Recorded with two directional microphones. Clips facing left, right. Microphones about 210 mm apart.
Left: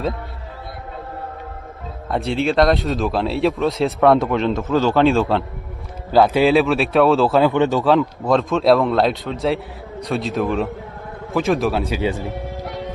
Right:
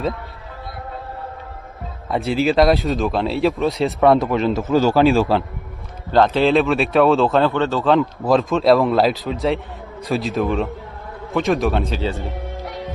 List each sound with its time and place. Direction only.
2.0 s speech: centre (ahead or behind)
6.1 s a man's voice: 10° left (ahead or behind)
6.5 s speech: centre (ahead or behind)
7.4 s a man's voice: 15° left (ahead or behind)
7.9 s speech: centre (ahead or behind)
12.1 s music: centre (ahead or behind)